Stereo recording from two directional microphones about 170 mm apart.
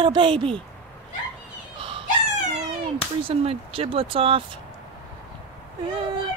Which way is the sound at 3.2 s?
35° right (ahead or behind).